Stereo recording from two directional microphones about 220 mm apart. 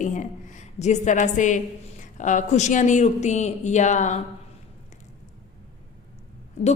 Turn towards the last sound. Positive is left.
turn(degrees=30)  # may be behind; listen again after turning